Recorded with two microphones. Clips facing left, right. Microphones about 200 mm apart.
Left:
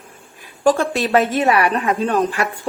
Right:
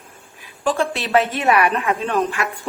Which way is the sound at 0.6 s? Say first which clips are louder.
Left 5 dB; 45° left (ahead or behind).